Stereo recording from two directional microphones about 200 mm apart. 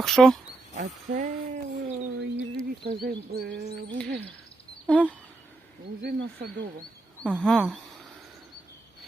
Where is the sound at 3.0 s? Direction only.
50° right (ahead or behind).